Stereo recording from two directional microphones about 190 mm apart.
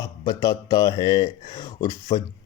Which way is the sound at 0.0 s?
20° left (ahead or behind).